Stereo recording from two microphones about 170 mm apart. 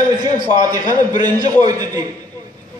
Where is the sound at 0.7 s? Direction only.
25° right (ahead or behind).